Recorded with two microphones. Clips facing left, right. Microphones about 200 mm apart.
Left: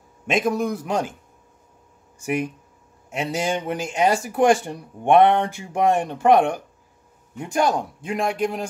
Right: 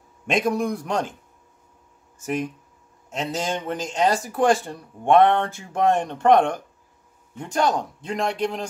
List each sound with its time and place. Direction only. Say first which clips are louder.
0.3 s speech: left 1 dB; centre (ahead or behind)
2.1 s speech: left 2 dB; 10° left (ahead or behind)